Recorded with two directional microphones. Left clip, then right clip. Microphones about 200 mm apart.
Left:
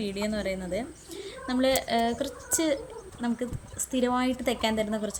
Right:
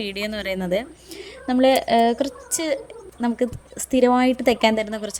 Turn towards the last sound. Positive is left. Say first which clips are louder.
# right 8 dB
turn(degrees=-35)  # may be behind; listen again after turning